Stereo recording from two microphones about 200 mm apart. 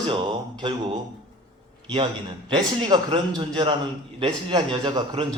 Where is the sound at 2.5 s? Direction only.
25° right (ahead or behind).